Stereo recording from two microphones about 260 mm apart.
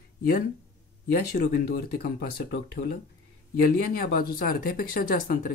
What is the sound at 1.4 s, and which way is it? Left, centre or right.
Speech, left.